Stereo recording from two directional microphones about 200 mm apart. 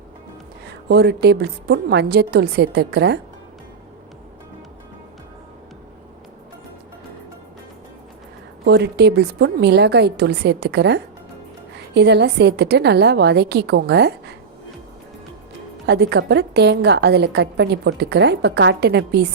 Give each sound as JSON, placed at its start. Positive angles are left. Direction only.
{"t": 0.9, "sound": "a woman's voice", "side_deg": -55}
{"t": 8.6, "sound": "a woman's voice", "side_deg": -55}
{"t": 15.9, "sound": "a woman's voice", "side_deg": -55}